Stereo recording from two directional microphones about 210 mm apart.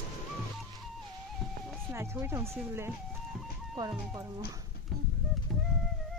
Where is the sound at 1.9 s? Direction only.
10° right (ahead or behind).